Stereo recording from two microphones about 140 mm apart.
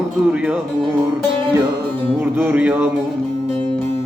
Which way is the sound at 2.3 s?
15° right (ahead or behind).